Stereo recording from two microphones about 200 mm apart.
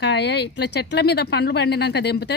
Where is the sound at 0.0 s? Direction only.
60° left (ahead or behind).